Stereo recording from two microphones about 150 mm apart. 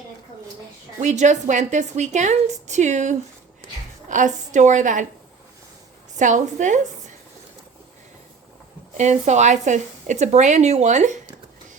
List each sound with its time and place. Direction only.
0.9 s a woman's voice: 50° right (ahead or behind)
6.1 s a woman's voice: 55° right (ahead or behind)
9.0 s speech: 50° right (ahead or behind)